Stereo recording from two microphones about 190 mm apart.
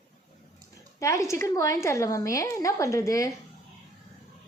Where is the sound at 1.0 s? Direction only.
15° left (ahead or behind).